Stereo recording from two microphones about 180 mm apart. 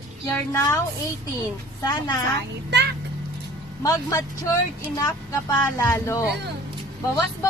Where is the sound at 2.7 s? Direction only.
65° right (ahead or behind).